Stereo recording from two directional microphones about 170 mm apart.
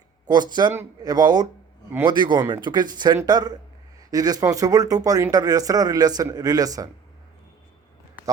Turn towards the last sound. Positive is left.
turn(degrees=-20)  # may be behind; listen again after turning